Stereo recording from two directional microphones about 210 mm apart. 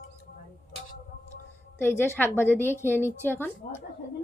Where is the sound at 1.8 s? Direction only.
10° left (ahead or behind).